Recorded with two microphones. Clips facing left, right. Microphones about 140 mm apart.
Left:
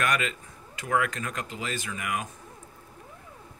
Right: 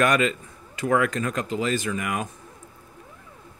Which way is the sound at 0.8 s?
40° right (ahead or behind).